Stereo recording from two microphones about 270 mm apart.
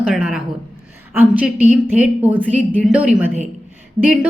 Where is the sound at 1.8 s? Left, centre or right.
Centre.